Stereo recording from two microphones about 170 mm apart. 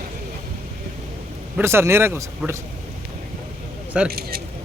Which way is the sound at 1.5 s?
15° right (ahead or behind).